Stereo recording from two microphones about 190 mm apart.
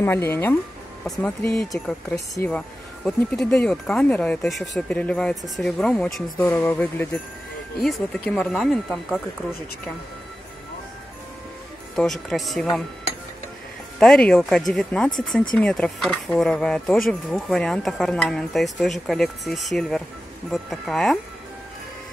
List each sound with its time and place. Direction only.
0.0 s speech: 10° left (ahead or behind)
2.1 s speech: 15° left (ahead or behind)
3.1 s speech: 5° left (ahead or behind)
6.3 s speech: 10° left (ahead or behind)
11.9 s speech: centre (ahead or behind)
13.9 s speech: 5° left (ahead or behind)